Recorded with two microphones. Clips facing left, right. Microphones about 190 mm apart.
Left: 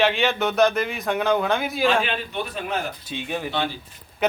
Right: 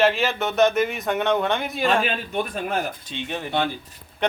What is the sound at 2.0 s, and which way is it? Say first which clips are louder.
Speech: right 2 dB; 45° right (ahead or behind).